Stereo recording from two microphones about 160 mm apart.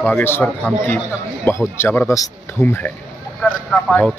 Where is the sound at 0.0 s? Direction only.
10° left (ahead or behind).